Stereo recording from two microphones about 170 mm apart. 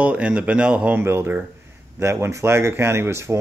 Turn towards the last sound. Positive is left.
turn(degrees=-15)  # may be behind; listen again after turning